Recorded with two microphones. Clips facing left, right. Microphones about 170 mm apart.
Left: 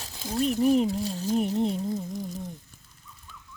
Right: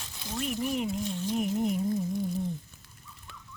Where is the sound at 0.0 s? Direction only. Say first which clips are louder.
Left 8 dB; 35° left (ahead or behind).